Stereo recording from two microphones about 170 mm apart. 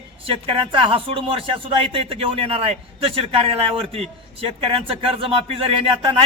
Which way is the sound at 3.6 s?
35° right (ahead or behind).